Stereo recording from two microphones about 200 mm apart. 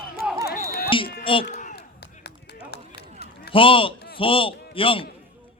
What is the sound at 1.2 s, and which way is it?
Speech, 25° left (ahead or behind).